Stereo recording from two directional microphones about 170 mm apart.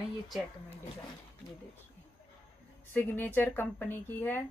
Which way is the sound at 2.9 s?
10° left (ahead or behind).